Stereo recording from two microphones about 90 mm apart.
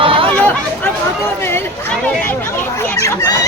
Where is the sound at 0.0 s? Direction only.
80° right.